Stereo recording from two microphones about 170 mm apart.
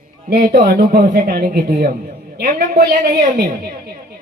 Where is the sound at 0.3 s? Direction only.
60° right (ahead or behind).